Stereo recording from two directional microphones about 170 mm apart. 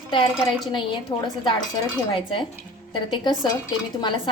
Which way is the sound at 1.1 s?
25° left (ahead or behind).